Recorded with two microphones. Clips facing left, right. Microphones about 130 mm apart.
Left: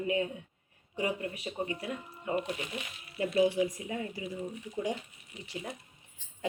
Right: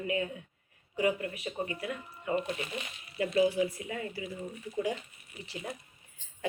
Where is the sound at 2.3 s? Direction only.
15° left (ahead or behind).